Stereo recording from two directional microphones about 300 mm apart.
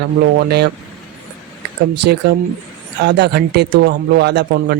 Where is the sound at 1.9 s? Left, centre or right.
Right.